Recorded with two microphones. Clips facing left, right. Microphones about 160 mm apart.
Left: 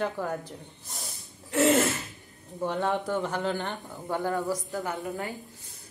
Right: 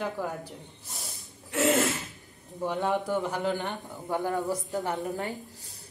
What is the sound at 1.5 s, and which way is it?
Speech, centre (ahead or behind).